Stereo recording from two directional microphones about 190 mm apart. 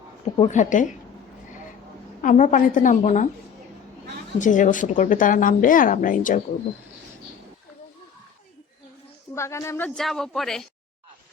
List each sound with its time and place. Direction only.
0.3 s speech: 40° left (ahead or behind)
2.2 s speech: 45° left (ahead or behind)
4.4 s speech: 40° left (ahead or behind)
9.3 s a woman's voice: 15° left (ahead or behind)